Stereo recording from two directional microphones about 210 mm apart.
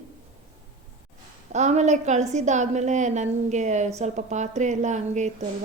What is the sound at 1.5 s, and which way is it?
A woman's voice, 35° right (ahead or behind).